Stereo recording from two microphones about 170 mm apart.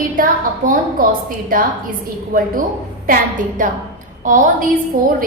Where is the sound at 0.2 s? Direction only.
55° right (ahead or behind).